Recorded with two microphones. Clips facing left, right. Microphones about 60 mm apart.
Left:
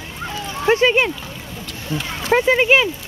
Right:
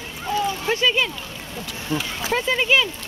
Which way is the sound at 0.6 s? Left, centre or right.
Left.